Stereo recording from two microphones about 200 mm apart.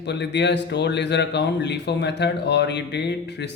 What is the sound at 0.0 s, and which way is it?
Speech, 60° left (ahead or behind).